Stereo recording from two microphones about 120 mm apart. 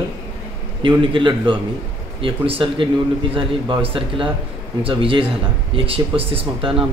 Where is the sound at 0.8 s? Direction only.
45° right (ahead or behind).